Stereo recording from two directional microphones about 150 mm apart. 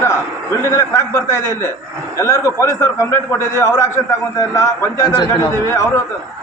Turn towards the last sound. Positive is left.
turn(degrees=20)  # may be behind; listen again after turning